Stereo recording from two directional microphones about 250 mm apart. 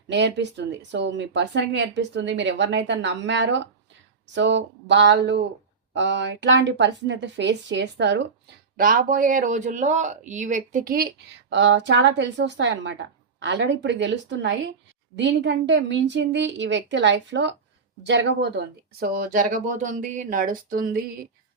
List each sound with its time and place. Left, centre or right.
0.1 s speech: right
8.8 s speech: right